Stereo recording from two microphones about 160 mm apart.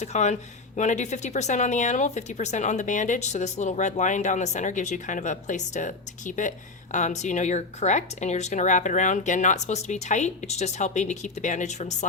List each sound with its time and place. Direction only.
0.0 s speech: 45° left (ahead or behind)